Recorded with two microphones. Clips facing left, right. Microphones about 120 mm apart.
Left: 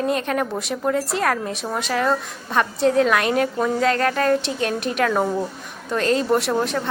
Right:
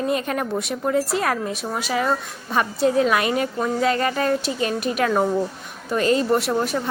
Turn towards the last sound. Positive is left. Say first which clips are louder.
# left 1 dB
turn(degrees=0)  # may be behind; listen again after turning